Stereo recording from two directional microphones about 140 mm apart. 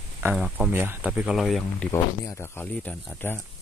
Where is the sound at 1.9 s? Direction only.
20° left (ahead or behind).